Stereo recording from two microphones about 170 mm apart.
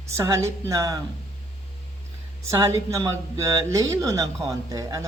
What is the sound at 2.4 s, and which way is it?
A man's voice, 15° right (ahead or behind).